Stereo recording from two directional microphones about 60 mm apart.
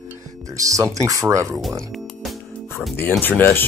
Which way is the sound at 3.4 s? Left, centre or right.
Left.